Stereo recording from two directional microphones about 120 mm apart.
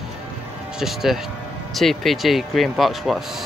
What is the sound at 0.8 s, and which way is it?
Speech, 5° right (ahead or behind).